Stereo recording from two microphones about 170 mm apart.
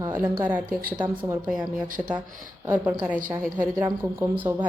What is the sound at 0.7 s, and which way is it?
Speech, 60° right (ahead or behind).